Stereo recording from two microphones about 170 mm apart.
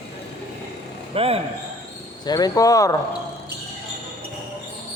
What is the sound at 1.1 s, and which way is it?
Speech, 35° right (ahead or behind).